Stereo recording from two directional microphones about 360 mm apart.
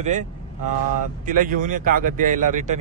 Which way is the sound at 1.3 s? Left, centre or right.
Right.